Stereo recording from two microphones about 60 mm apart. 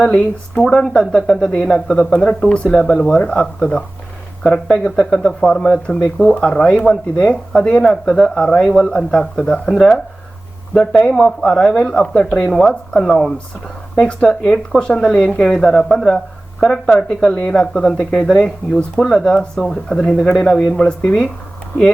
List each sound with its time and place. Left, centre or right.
0.6 s speech: centre
11.4 s speech: centre
15.4 s speech: centre